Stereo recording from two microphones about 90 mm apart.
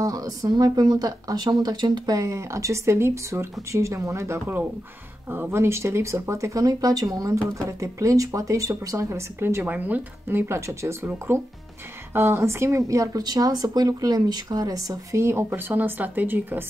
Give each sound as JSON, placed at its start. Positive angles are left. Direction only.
{"t": 0.0, "sound": "speech", "side_deg": -40}
{"t": 2.1, "sound": "speech", "side_deg": -35}